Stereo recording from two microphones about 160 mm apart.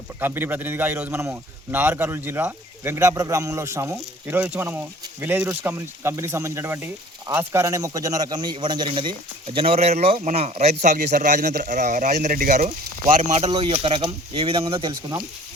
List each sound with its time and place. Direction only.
0.2 s a man's voice: 15° right (ahead or behind); by 10.8 s 40° right (ahead or behind)
10.8 s a man's voice: 50° right (ahead or behind); by 14.9 s 30° right (ahead or behind)